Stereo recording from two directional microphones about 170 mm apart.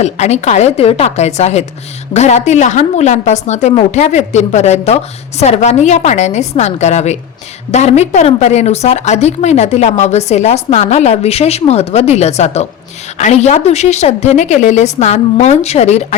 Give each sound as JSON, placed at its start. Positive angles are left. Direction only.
{"t": 0.0, "sound": "a woman's voice", "side_deg": 40}